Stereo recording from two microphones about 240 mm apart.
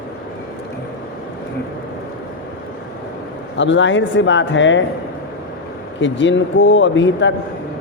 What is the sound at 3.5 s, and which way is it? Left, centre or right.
Speech, left.